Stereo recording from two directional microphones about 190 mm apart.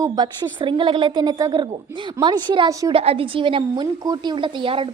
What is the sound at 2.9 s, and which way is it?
A woman's voice, 30° right (ahead or behind).